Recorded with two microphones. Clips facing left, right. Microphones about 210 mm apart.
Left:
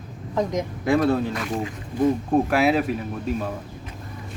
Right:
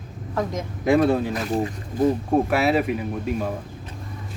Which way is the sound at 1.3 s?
35° right (ahead or behind).